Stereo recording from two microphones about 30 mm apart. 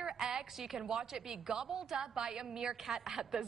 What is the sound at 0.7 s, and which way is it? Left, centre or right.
A woman's voice, right.